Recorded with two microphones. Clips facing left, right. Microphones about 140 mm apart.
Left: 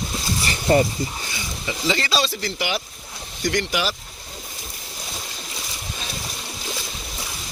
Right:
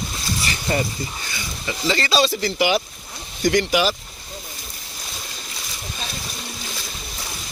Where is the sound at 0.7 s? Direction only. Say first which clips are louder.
Left 6 dB; 35° left (ahead or behind).